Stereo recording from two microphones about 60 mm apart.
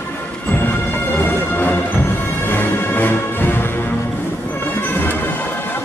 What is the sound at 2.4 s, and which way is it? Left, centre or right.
Music, left.